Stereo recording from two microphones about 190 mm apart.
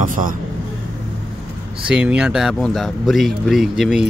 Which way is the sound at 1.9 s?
5° right (ahead or behind).